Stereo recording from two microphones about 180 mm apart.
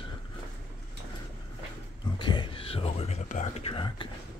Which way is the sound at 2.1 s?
25° left (ahead or behind).